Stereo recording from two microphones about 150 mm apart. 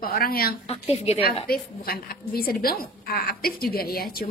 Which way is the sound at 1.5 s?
90° left.